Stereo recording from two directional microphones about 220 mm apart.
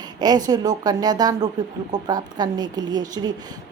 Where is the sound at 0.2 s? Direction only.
20° right (ahead or behind).